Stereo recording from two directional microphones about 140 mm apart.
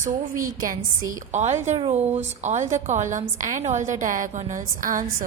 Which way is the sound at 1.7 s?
50° right (ahead or behind).